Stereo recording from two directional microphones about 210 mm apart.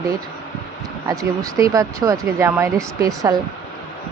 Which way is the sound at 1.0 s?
15° right (ahead or behind).